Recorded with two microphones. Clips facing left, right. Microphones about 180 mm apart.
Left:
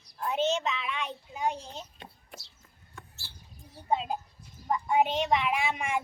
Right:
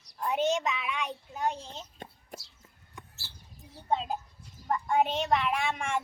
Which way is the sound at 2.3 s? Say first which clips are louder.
Right 5 dB; 40° right (ahead or behind).